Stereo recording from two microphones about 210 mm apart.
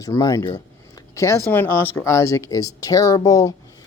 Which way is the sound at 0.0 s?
15° left (ahead or behind).